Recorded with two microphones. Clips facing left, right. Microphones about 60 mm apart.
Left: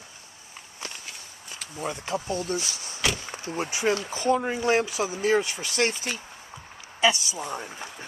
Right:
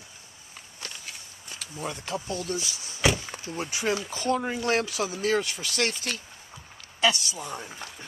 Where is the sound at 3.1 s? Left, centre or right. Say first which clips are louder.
Right 2 dB; centre.